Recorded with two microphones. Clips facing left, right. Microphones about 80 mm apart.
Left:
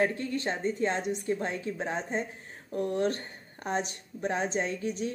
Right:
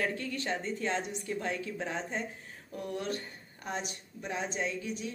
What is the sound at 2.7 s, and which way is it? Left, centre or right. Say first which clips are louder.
A woman's voice: left 7 dB; left.